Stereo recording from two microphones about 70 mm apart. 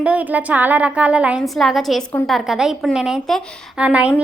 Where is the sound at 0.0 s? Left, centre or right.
Right.